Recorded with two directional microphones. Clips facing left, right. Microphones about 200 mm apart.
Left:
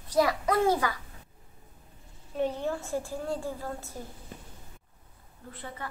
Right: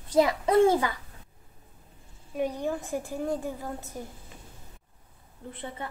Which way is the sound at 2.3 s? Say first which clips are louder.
Right 1 dB; 15° right (ahead or behind).